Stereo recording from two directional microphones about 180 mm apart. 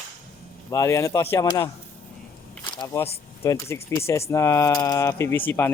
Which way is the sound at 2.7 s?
25° left (ahead or behind).